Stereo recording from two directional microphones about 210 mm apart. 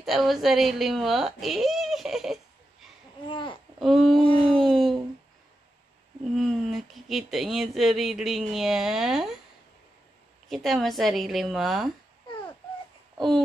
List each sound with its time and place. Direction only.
0.0 s a woman's voice: centre (ahead or behind)
3.3 s a sound: 25° left (ahead or behind)
3.8 s speech: centre (ahead or behind)
4.5 s a sound: centre (ahead or behind)
6.3 s speech: centre (ahead or behind)
10.5 s speech: centre (ahead or behind)